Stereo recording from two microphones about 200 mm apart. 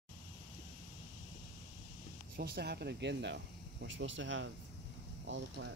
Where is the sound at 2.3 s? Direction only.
50° right (ahead or behind); by 4.4 s 70° right (ahead or behind).